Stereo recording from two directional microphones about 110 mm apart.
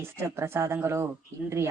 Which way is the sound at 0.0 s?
25° right (ahead or behind).